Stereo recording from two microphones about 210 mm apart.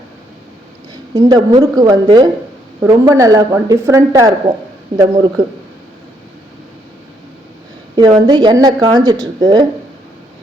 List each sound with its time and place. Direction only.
1.1 s a woman's voice: 20° right (ahead or behind)
7.9 s a woman's voice: 20° right (ahead or behind)